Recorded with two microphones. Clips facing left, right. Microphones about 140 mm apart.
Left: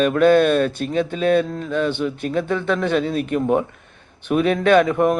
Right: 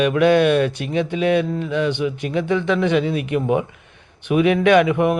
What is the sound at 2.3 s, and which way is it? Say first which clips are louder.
Mantra: right 2 dB; 50° left (ahead or behind).